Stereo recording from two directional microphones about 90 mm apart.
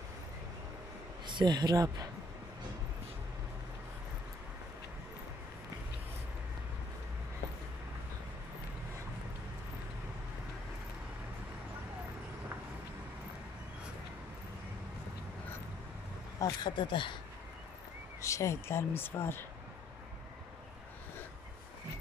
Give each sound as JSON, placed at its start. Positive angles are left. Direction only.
{"t": 1.2, "sound": "speech", "side_deg": -55}
{"t": 16.3, "sound": "speech", "side_deg": 40}
{"t": 16.7, "sound": "speech", "side_deg": 60}
{"t": 18.2, "sound": "speech", "side_deg": 35}